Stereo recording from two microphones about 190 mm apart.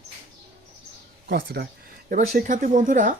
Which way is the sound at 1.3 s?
55° right (ahead or behind).